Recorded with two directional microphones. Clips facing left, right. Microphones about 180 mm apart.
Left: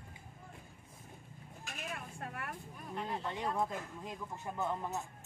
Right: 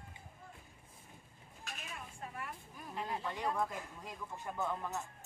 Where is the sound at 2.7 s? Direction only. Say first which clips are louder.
Even; centre (ahead or behind).